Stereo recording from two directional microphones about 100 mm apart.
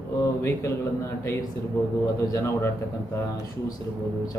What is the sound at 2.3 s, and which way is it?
Speech, 30° left (ahead or behind).